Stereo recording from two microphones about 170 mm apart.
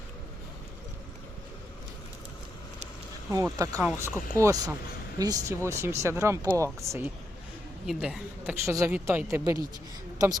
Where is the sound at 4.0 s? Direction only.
15° right (ahead or behind).